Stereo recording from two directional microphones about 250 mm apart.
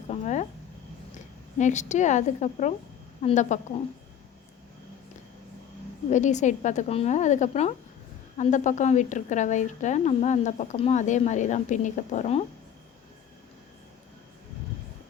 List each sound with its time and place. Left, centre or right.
0.1 s a sound: left
1.5 s a woman's voice: left
6.1 s speech: left